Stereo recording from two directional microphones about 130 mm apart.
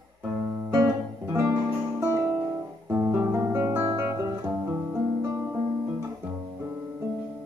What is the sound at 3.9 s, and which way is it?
Guitar, 35° right (ahead or behind).